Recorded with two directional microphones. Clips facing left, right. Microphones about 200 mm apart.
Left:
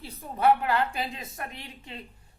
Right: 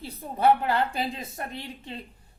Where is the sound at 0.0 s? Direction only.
30° right (ahead or behind).